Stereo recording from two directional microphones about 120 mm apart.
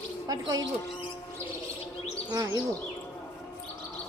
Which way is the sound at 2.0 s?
35° right (ahead or behind).